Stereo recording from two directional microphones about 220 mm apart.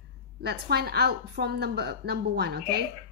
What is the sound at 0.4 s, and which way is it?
A woman's voice, 45° right (ahead or behind).